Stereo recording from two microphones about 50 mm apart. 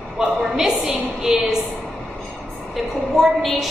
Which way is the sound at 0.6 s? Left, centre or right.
Centre.